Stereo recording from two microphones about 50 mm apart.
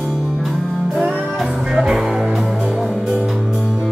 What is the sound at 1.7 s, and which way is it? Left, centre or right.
Music, centre.